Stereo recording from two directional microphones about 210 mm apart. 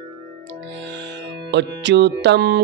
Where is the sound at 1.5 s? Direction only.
55° right (ahead or behind).